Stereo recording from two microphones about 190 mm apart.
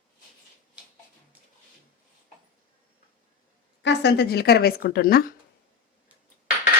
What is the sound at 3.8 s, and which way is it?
Speech, 60° left (ahead or behind).